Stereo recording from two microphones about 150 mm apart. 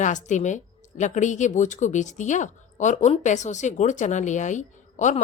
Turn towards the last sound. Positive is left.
turn(degrees=55)  # may be behind; listen again after turning